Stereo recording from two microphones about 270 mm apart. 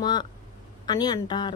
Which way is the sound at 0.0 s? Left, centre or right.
Centre.